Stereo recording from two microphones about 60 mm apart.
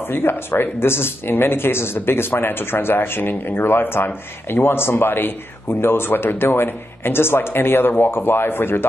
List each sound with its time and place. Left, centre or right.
0.1 s speech: left